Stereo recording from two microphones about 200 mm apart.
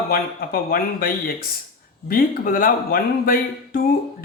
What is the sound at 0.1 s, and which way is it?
Speech, 45° left (ahead or behind).